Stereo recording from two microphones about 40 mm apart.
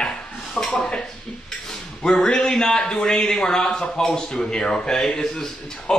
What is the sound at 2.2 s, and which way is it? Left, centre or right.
A man's voice, left.